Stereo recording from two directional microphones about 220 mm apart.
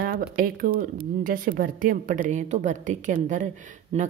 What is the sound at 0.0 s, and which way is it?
Speech, 40° right (ahead or behind).